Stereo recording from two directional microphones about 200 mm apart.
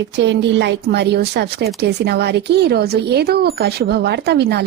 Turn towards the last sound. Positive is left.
turn(degrees=-55)  # may be behind; listen again after turning